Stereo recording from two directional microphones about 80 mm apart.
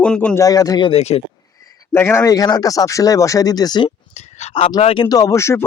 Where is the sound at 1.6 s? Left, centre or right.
Left.